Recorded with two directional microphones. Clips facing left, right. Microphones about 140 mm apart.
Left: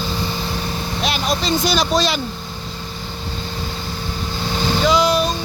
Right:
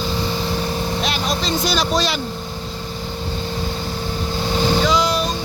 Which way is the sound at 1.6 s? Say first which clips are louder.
Left 1 dB; 20° left (ahead or behind).